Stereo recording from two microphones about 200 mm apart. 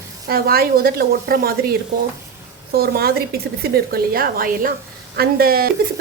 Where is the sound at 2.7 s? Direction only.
50° right (ahead or behind).